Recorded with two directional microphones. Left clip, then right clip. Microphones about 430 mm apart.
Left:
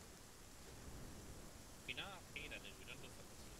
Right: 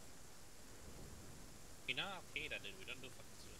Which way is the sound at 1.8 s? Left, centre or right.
Centre.